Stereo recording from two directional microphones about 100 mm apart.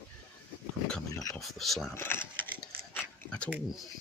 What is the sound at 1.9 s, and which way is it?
Speech, 20° left (ahead or behind).